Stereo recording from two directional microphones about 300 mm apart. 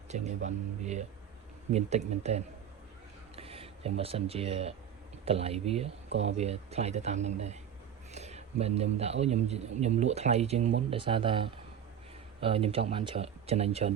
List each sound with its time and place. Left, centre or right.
0.1 s speech: right
6.1 s speech: right
6.3 s speech: right